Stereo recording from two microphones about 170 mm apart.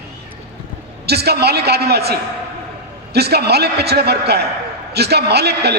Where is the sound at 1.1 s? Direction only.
70° right (ahead or behind).